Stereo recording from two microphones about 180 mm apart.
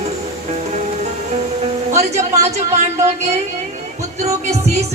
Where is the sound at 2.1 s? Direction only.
40° right (ahead or behind).